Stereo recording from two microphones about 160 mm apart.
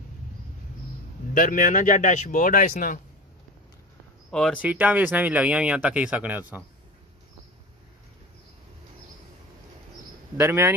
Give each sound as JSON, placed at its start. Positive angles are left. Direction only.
{"t": 1.3, "sound": "speech", "side_deg": 60}
{"t": 4.3, "sound": "speech", "side_deg": 5}
{"t": 4.6, "sound": "speech", "side_deg": -10}
{"t": 10.3, "sound": "speech", "side_deg": -15}